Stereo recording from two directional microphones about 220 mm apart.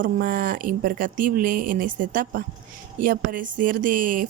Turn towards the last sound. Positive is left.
turn(degrees=-40)  # may be behind; listen again after turning